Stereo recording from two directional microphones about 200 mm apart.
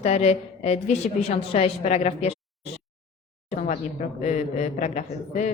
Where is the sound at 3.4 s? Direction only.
35° left (ahead or behind).